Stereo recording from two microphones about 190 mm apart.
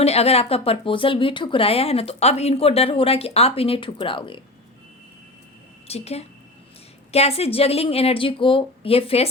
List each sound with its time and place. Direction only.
0.0 s speech: 35° left (ahead or behind)
5.9 s speech: 35° left (ahead or behind)